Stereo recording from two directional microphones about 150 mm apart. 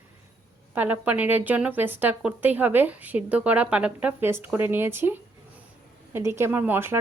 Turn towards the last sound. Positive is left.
turn(degrees=-15)  # may be behind; listen again after turning